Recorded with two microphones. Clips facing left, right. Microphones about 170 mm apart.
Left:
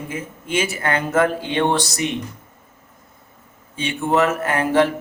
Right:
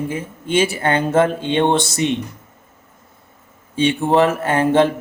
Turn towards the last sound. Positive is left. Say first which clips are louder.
# right 3 dB
turn(degrees=-25)  # may be behind; listen again after turning